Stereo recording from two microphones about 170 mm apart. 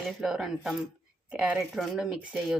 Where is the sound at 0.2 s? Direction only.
5° right (ahead or behind).